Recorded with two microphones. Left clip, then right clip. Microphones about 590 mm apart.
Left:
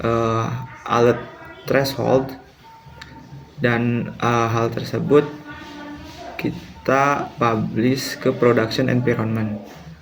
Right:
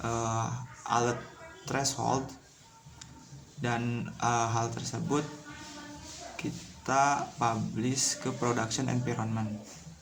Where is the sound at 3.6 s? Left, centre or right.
Right.